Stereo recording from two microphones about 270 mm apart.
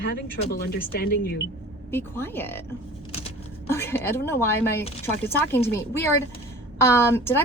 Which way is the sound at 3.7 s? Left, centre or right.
Centre.